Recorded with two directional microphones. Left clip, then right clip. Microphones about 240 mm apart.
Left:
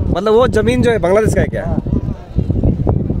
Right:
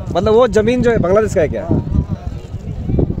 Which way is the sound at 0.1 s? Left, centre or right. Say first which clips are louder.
Right 1 dB; centre.